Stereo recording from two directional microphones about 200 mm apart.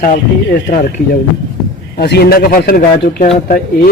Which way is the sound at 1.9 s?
50° left (ahead or behind).